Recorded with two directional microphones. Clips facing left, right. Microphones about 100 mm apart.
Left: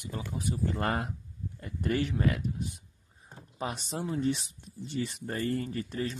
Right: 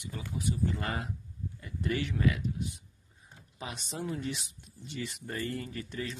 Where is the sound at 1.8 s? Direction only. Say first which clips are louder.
Left 3 dB; 40° left (ahead or behind).